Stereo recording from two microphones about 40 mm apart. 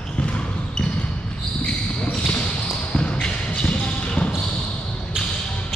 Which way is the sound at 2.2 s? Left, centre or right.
Left.